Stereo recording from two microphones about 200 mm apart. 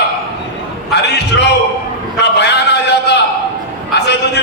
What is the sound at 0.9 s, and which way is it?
Speech, 55° left (ahead or behind).